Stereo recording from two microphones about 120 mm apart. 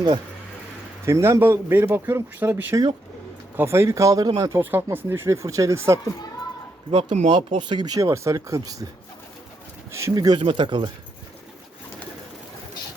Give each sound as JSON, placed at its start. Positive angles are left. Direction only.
{"t": 1.0, "sound": "speech", "side_deg": -25}
{"t": 7.3, "sound": "speech", "side_deg": -40}
{"t": 9.9, "sound": "speech", "side_deg": -30}
{"t": 10.4, "sound": "speech", "side_deg": -45}